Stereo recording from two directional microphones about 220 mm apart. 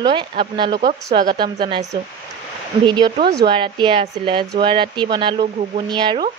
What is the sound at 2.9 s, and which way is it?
A woman's voice, 20° right (ahead or behind).